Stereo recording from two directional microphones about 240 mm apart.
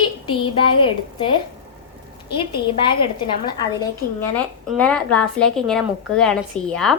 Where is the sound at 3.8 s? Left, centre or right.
Centre.